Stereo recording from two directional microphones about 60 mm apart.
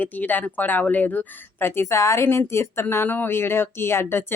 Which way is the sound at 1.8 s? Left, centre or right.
Left.